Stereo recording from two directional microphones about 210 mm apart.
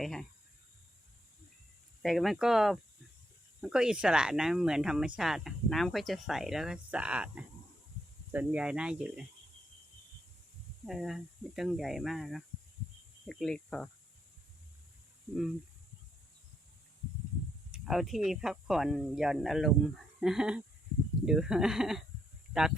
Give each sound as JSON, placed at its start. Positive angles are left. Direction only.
{"t": 0.0, "sound": "speech", "side_deg": 0}
{"t": 2.0, "sound": "speech", "side_deg": 0}
{"t": 10.8, "sound": "speech", "side_deg": 0}
{"t": 17.7, "sound": "speech", "side_deg": 0}